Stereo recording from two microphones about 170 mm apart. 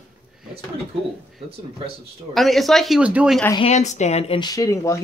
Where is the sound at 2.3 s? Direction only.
Centre (ahead or behind).